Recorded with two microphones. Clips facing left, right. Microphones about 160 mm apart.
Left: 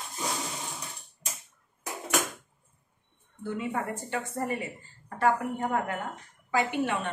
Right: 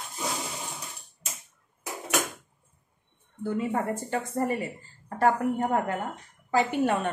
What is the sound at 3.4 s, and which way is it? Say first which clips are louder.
A woman's voice: right 4 dB; 35° right (ahead or behind).